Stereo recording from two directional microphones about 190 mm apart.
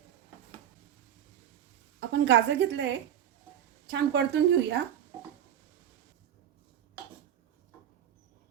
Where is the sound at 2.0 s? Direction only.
70° right (ahead or behind).